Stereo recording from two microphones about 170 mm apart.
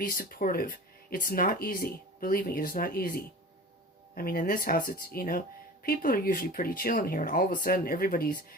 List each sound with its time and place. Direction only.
0.0 s speech: 55° left (ahead or behind)